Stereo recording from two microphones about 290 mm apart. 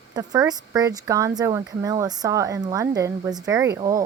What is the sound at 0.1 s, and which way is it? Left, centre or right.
Speech, centre.